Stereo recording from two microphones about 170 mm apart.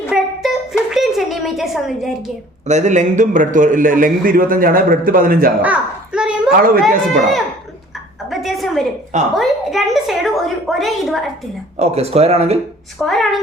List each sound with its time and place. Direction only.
0.1 s a sound: 5° right (ahead or behind)
2.6 s a man's voice: 45° right (ahead or behind)
5.6 s a child's voice: 5° right (ahead or behind)
6.5 s speech: 60° right (ahead or behind)
6.8 s a woman's voice: centre (ahead or behind)
11.8 s a man's voice: 40° right (ahead or behind)
13.0 s a woman's voice: centre (ahead or behind)